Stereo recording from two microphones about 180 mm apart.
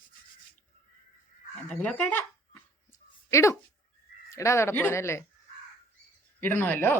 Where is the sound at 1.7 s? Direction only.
5° left (ahead or behind).